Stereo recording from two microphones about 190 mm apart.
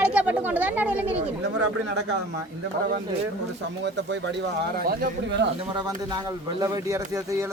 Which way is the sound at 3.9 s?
70° right (ahead or behind).